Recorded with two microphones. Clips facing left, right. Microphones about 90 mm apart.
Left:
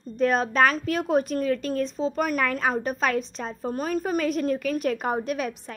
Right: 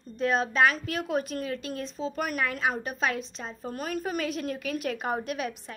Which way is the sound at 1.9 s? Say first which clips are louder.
Left 5 dB; 35° left (ahead or behind).